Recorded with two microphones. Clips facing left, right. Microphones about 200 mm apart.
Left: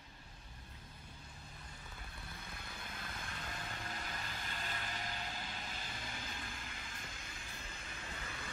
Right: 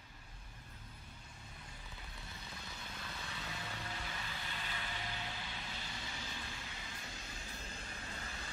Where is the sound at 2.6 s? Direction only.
55° left (ahead or behind).